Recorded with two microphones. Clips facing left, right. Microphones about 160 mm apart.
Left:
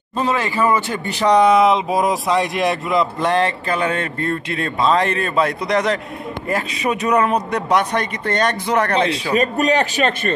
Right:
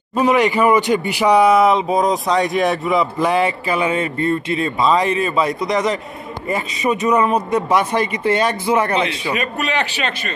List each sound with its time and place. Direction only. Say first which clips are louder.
0.1 s speech: right 5 dB; 15° right (ahead or behind)
9.4 s a man's voice: left 7 dB; 40° left (ahead or behind)